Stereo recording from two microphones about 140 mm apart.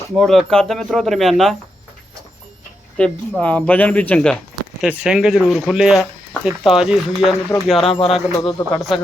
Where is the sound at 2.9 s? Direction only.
5° left (ahead or behind).